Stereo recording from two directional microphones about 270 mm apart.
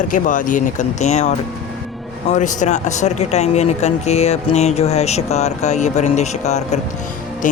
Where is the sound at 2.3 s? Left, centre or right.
Left.